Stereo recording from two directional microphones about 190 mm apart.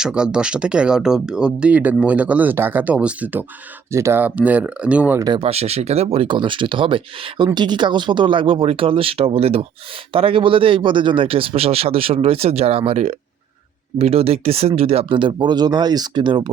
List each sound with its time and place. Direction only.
0.0 s speech: 5° right (ahead or behind)
5.2 s speech: 25° right (ahead or behind)